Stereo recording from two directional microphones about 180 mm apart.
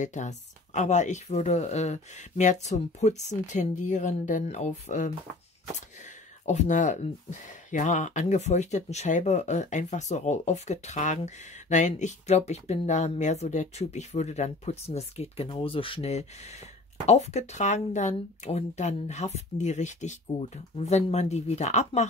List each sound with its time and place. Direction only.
0.0 s speech: 40° left (ahead or behind)
6.4 s speech: 40° left (ahead or behind)